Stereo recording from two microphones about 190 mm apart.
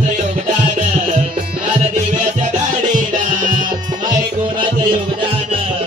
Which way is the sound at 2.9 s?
45° right (ahead or behind).